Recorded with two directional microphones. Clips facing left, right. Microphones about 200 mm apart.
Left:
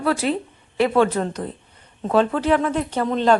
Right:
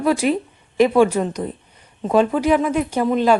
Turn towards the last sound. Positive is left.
turn(degrees=-10)  # may be behind; listen again after turning